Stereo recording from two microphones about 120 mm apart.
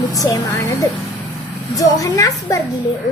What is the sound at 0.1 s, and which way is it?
A woman's voice, 30° left (ahead or behind).